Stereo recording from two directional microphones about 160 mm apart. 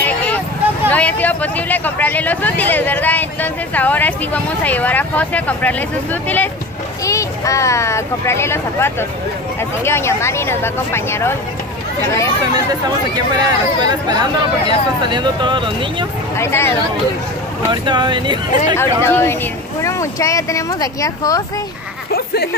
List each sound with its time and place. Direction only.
0.0 s vehicle: 10° left (ahead or behind)
0.8 s speech: 10° left (ahead or behind)
12.5 s speech: 25° right (ahead or behind)
16.3 s speech: 15° left (ahead or behind)
17.6 s speech: 30° right (ahead or behind)
18.8 s speech: 15° left (ahead or behind)
22.1 s speech: 80° left